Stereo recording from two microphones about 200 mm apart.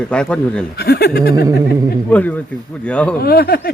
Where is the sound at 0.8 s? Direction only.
50° left (ahead or behind).